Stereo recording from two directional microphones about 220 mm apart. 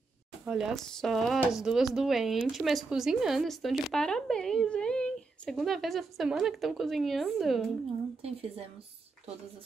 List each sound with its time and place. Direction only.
0.5 s speech: centre (ahead or behind)
8.2 s a woman's voice: 25° right (ahead or behind)